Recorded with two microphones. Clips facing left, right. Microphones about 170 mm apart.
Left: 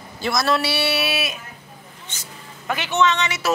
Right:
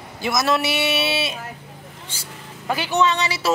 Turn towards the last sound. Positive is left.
turn(degrees=-35)  # may be behind; listen again after turning